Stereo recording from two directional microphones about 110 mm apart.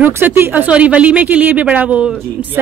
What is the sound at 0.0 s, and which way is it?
Speech, 20° right (ahead or behind).